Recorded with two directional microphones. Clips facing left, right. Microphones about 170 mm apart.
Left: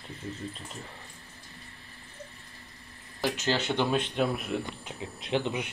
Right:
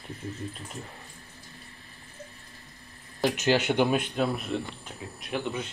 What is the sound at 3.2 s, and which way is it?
Cutlery, 15° right (ahead or behind).